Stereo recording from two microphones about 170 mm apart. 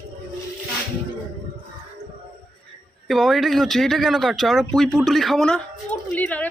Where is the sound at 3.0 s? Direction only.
Centre (ahead or behind).